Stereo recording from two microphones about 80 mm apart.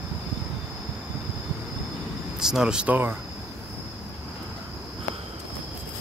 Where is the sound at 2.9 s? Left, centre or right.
Right.